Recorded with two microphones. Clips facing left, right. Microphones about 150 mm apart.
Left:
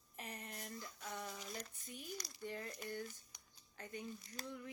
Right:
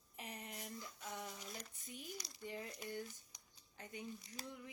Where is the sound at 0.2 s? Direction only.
15° right (ahead or behind).